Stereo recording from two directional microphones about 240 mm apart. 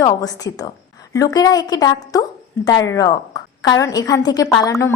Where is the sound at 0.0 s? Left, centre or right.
Centre.